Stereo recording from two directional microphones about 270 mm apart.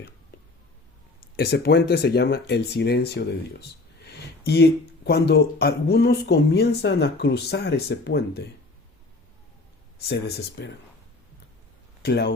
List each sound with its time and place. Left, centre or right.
1.4 s speech: left
10.1 s speech: left
12.0 s speech: left